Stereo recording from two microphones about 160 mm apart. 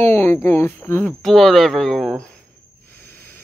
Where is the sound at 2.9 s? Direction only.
10° left (ahead or behind).